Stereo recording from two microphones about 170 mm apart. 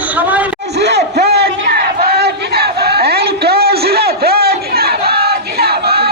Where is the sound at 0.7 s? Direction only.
80° right.